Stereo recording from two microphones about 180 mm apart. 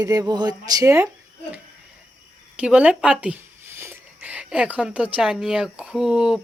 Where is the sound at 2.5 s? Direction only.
5° right (ahead or behind).